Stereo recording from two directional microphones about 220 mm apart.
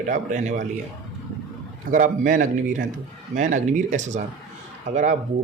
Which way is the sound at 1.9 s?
35° right (ahead or behind).